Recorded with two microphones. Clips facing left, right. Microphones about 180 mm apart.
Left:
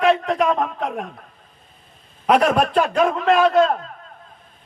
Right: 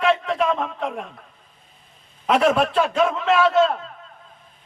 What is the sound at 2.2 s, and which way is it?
A man's voice, 50° left (ahead or behind).